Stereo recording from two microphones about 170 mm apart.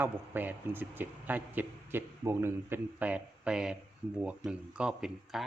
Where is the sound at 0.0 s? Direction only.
10° right (ahead or behind).